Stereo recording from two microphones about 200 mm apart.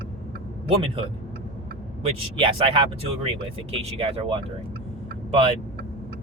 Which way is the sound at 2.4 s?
25° right (ahead or behind).